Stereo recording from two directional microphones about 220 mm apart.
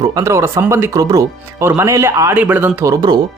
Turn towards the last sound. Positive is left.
turn(degrees=-20)  # may be behind; listen again after turning